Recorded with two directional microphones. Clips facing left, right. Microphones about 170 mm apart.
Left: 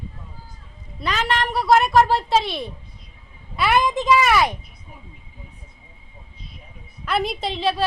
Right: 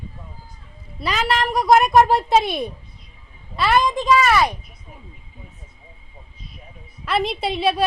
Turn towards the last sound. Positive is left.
turn(degrees=-10)  # may be behind; listen again after turning